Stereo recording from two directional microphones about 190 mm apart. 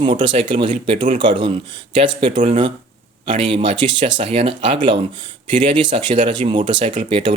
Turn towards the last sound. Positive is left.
turn(degrees=-30)  # may be behind; listen again after turning